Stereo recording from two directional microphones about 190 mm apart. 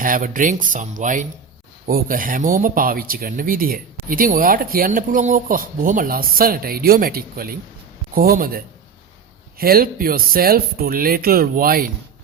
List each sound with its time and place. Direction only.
0.0 s speech: 45° right (ahead or behind)